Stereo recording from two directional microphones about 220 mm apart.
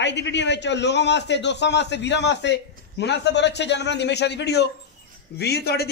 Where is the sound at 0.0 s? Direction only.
55° left (ahead or behind).